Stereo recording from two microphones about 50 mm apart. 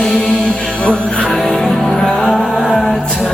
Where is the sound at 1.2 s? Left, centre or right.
Centre.